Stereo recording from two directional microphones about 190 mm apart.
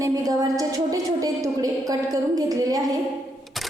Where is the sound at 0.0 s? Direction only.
15° right (ahead or behind).